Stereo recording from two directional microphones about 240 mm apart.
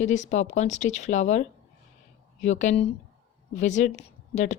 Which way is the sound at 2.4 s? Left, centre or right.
Left.